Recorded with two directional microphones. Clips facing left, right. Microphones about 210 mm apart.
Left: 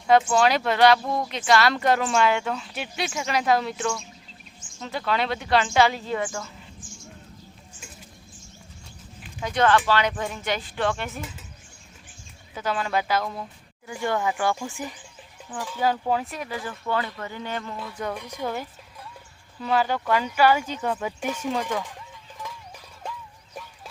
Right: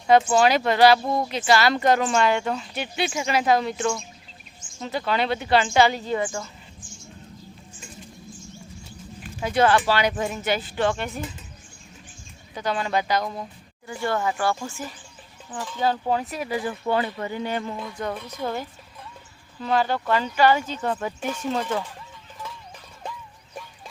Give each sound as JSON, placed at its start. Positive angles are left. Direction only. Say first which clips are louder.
{"t": 0.1, "sound": "speech", "louder": "right 2 dB", "side_deg": -5}
{"t": 1.0, "sound": "speech", "louder": "right 2 dB", "side_deg": -25}
{"t": 1.3, "sound": "speech", "louder": "even", "side_deg": 0}
{"t": 9.4, "sound": "speech", "louder": "right 1 dB", "side_deg": -5}
{"t": 12.5, "sound": "speech", "louder": "right 1 dB", "side_deg": 5}
{"t": 13.2, "sound": "speech", "louder": "right 1 dB", "side_deg": -15}
{"t": 13.8, "sound": "speech", "louder": "even", "side_deg": 15}
{"t": 16.3, "sound": "speech", "louder": "right 4 dB", "side_deg": -5}
{"t": 16.9, "sound": "speech", "louder": "right 3 dB", "side_deg": -20}
{"t": 18.0, "sound": "speech", "louder": "even", "side_deg": 10}